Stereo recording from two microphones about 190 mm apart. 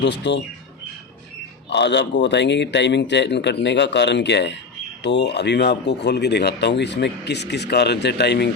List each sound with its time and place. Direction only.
0.0 s speech: 65° left (ahead or behind)
1.7 s speech: 65° left (ahead or behind)